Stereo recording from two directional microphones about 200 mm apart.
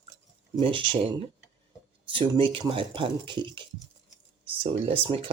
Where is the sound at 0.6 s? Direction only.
25° right (ahead or behind).